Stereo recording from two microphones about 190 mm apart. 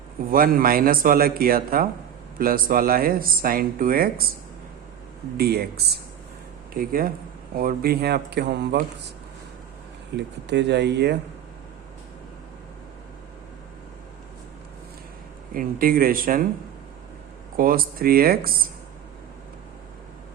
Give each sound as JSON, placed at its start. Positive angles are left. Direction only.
{"t": 0.3, "sound": "speech", "side_deg": -50}
{"t": 5.4, "sound": "speech", "side_deg": -55}
{"t": 10.2, "sound": "speech", "side_deg": -65}
{"t": 15.5, "sound": "speech", "side_deg": -50}
{"t": 17.6, "sound": "speech", "side_deg": -50}